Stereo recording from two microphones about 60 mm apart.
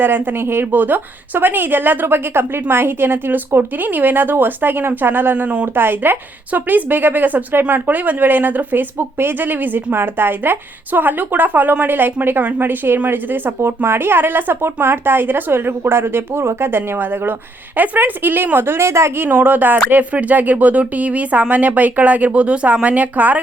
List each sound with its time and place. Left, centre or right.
0.0 s a woman's voice: right
19.1 s a woman's voice: right